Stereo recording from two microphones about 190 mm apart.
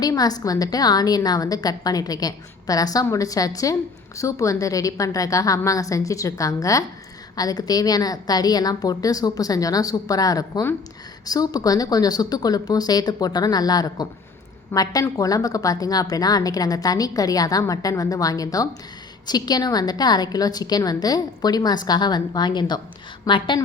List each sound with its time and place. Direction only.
0.0 s a woman's voice: 20° left (ahead or behind)